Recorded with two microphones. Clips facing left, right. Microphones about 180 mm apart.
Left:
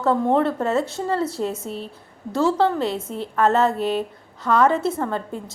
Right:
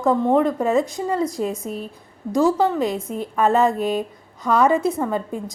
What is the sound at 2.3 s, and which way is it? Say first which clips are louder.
A woman's voice: right 2 dB; 10° right (ahead or behind).